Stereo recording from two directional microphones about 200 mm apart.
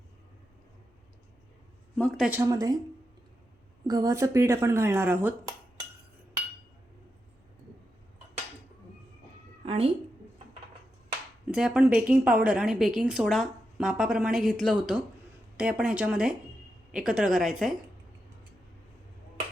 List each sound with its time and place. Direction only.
2.0 s a woman's voice: centre (ahead or behind)
2.4 s speech: 15° right (ahead or behind)
3.8 s speech: 15° right (ahead or behind)
9.6 s cat: 30° right (ahead or behind)
11.4 s a woman's voice: 5° right (ahead or behind)